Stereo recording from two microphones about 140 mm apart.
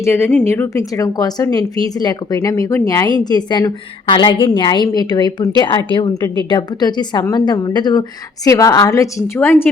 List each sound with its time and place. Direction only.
0.0 s a woman's voice: 15° left (ahead or behind)